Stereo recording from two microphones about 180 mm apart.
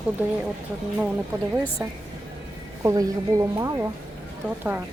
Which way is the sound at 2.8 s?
20° right (ahead or behind).